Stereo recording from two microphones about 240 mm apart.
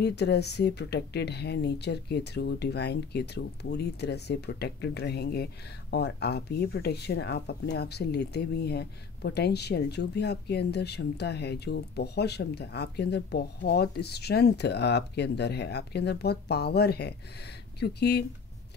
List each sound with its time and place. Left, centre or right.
0.0 s speech: left